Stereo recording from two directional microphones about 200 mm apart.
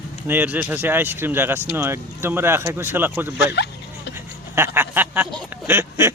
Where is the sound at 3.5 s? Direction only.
55° left (ahead or behind).